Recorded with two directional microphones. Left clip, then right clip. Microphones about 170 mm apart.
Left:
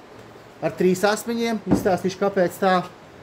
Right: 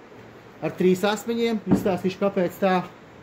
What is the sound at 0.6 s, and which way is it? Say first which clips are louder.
Speech: left 2 dB; 30° left (ahead or behind).